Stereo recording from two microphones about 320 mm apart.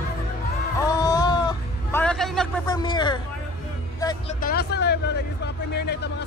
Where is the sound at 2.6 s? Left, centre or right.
Centre.